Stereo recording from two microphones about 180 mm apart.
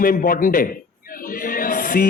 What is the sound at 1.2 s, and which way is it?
Music, 50° left (ahead or behind).